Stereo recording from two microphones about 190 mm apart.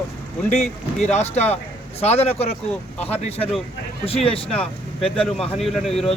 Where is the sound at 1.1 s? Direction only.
35° left (ahead or behind).